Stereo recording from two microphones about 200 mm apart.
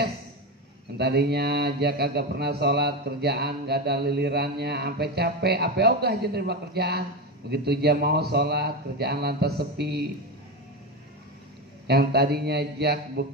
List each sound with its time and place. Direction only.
0.9 s a man's voice: 55° right (ahead or behind)
11.9 s a man's voice: 55° right (ahead or behind)